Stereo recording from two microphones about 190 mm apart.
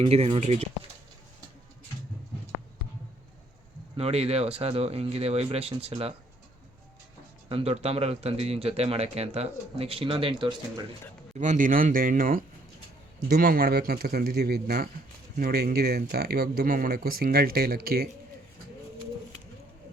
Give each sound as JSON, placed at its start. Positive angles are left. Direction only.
{"t": 0.0, "sound": "speech", "side_deg": -35}
{"t": 3.9, "sound": "speech", "side_deg": -30}
{"t": 7.5, "sound": "speech", "side_deg": -30}
{"t": 11.3, "sound": "speech", "side_deg": -40}